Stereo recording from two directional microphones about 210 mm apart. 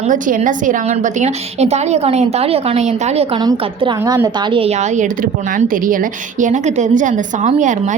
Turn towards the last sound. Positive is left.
turn(degrees=-35)  # may be behind; listen again after turning